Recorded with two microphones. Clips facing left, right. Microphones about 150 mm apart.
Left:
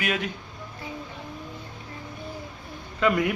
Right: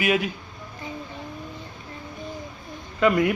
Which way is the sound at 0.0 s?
5° right (ahead or behind).